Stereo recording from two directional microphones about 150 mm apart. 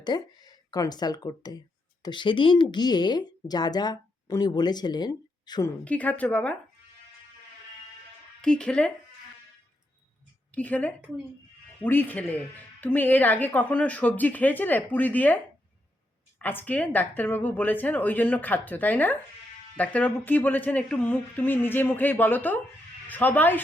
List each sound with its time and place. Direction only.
0.0 s speech: 25° left (ahead or behind)
5.8 s speech: 10° left (ahead or behind)
8.4 s speech: 5° left (ahead or behind)
10.5 s speech: 10° left (ahead or behind)
16.4 s speech: 15° left (ahead or behind)